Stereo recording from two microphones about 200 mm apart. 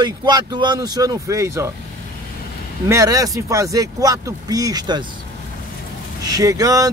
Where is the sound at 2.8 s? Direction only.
15° right (ahead or behind).